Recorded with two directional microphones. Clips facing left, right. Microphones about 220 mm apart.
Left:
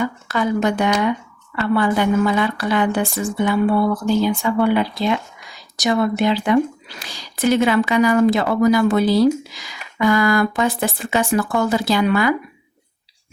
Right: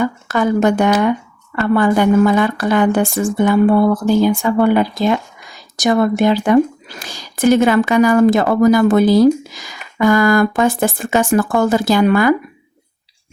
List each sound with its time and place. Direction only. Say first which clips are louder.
0.0 s speech: right 4 dB; 50° right (ahead or behind)